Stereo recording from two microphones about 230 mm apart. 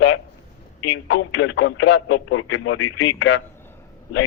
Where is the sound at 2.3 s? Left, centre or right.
Left.